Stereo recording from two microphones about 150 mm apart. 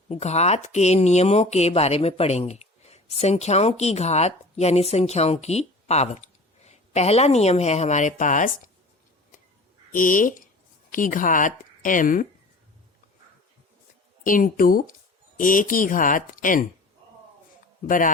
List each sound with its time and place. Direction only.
0.1 s speech: 45° left (ahead or behind)
9.9 s speech: 60° left (ahead or behind)
14.3 s speech: 65° left (ahead or behind)
17.8 s speech: 65° left (ahead or behind)